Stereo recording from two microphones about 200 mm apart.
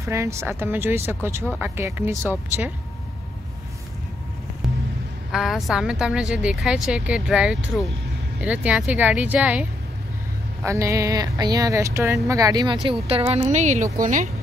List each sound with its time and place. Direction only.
0.0 s speech: 15° right (ahead or behind)
4.6 s music: centre (ahead or behind)
5.3 s a woman's voice: centre (ahead or behind); by 14.3 s 40° right (ahead or behind)